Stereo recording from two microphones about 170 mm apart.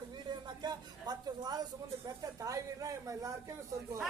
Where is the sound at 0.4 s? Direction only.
25° right (ahead or behind).